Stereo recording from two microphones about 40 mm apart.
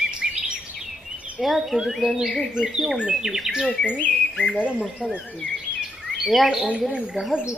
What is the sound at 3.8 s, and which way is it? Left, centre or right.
Speech, left.